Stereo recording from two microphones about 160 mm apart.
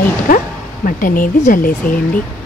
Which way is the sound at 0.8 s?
60° left (ahead or behind).